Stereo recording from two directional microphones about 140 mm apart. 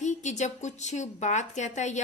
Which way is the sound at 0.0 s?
55° left (ahead or behind).